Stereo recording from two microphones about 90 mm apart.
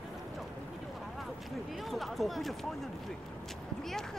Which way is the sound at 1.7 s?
Centre (ahead or behind).